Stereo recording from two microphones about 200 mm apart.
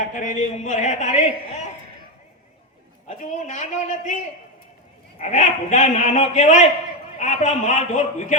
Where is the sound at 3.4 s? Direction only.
40° left (ahead or behind).